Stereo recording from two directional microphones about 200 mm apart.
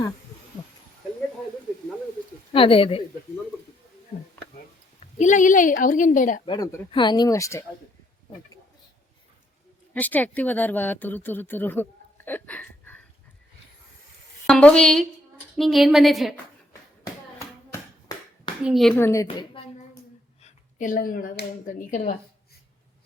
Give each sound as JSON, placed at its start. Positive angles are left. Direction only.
{"t": 2.5, "sound": "speech", "side_deg": 25}
{"t": 4.9, "sound": "a woman's voice", "side_deg": 35}
{"t": 6.4, "sound": "speech", "side_deg": 20}
{"t": 9.9, "sound": "speech", "side_deg": 10}
{"t": 14.4, "sound": "a woman's voice", "side_deg": 5}
{"t": 18.6, "sound": "a woman's voice", "side_deg": 0}
{"t": 18.9, "sound": "a woman's voice", "side_deg": 15}
{"t": 20.4, "sound": "a woman's voice", "side_deg": 40}